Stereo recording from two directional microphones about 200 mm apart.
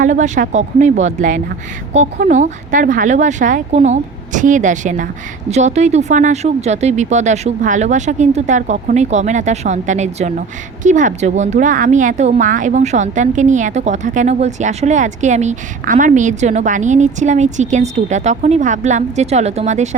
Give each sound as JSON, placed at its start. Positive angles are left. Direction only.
{"t": 0.0, "sound": "speech", "side_deg": -40}